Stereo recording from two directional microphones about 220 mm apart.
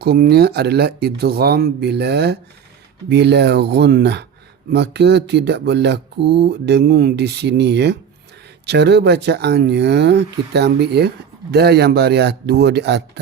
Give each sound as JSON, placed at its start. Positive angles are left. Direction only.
{"t": 0.0, "sound": "speech", "side_deg": -45}